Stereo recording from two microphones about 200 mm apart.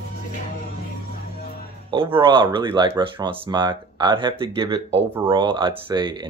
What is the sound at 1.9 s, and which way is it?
Speech, 25° right (ahead or behind).